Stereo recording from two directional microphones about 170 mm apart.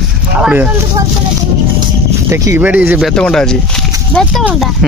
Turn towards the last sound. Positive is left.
turn(degrees=5)  # may be behind; listen again after turning